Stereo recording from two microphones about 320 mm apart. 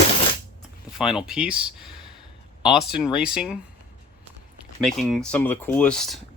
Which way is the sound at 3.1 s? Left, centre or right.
Centre.